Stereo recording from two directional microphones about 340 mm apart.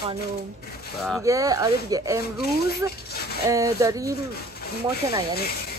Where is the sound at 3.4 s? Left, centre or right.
Centre.